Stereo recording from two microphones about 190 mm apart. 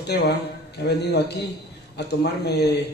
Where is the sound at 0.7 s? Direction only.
60° left (ahead or behind).